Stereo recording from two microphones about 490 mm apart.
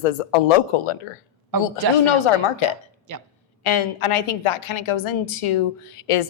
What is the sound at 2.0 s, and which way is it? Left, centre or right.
Speech, left.